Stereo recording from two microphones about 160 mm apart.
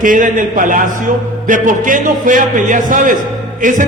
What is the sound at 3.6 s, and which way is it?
Music, 55° right (ahead or behind).